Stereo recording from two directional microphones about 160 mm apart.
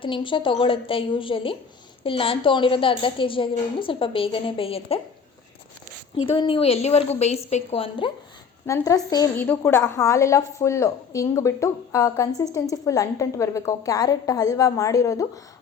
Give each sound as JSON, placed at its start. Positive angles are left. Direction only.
{"t": 0.0, "sound": "a woman's voice", "side_deg": 30}
{"t": 6.2, "sound": "a woman's voice", "side_deg": 35}
{"t": 8.6, "sound": "a woman's voice", "side_deg": 20}